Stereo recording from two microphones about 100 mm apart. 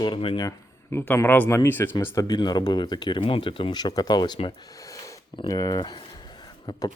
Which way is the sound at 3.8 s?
45° left (ahead or behind).